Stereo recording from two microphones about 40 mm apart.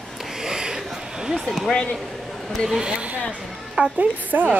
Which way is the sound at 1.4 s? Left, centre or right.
Centre.